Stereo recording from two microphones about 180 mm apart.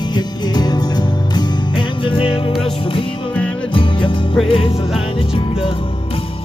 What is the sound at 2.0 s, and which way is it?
Music, 30° left (ahead or behind).